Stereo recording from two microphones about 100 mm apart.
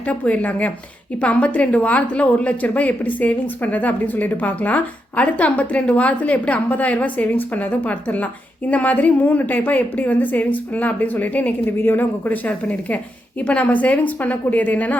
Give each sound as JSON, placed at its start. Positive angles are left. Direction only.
{"t": 0.0, "sound": "a woman's voice", "side_deg": 15}